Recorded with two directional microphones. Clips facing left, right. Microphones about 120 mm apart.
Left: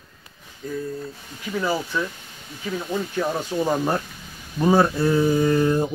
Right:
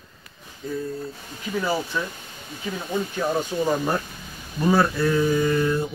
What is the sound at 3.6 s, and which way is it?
Speech, 15° left (ahead or behind).